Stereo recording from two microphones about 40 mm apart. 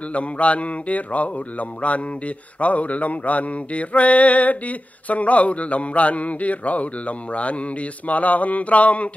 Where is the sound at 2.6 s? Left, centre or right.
Left.